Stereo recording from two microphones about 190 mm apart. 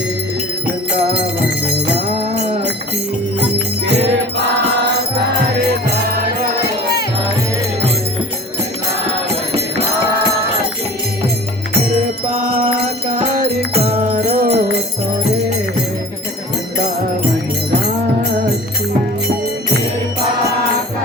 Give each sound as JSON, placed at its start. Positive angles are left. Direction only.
{"t": 2.3, "sound": "a sound", "side_deg": -35}
{"t": 12.3, "sound": "music", "side_deg": -35}
{"t": 13.7, "sound": "music", "side_deg": -30}
{"t": 14.3, "sound": "music", "side_deg": -55}